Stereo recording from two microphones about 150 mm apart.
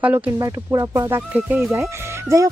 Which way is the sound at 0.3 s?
25° right (ahead or behind).